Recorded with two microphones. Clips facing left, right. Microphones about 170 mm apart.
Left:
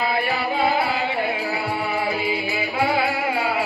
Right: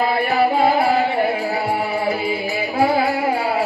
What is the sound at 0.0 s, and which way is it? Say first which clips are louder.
Music: right 6 dB; 45° right (ahead or behind).